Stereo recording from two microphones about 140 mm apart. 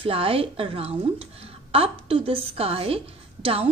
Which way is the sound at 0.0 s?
45° right (ahead or behind).